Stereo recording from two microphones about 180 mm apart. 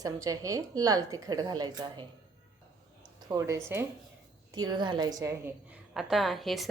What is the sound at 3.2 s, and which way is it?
A woman's voice, 20° right (ahead or behind).